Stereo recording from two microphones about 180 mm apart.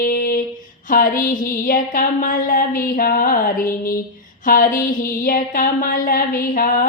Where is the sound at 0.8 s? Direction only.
50° left (ahead or behind).